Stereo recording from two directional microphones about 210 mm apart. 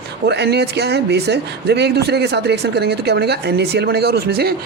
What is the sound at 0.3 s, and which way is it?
Speech, 50° right (ahead or behind).